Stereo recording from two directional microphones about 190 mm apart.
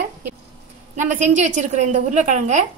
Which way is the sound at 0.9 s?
40° right (ahead or behind).